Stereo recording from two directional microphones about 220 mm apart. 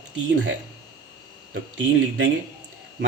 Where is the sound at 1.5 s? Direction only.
55° right (ahead or behind).